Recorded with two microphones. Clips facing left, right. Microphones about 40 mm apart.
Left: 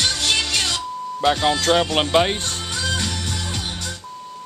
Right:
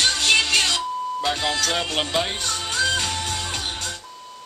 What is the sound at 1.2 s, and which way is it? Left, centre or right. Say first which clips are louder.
Speech: left 8 dB; left.